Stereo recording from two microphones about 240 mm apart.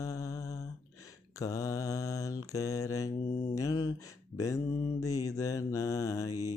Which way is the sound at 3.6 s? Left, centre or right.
Centre.